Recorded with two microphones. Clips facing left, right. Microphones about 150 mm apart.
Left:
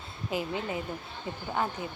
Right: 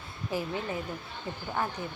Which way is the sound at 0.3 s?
20° left (ahead or behind).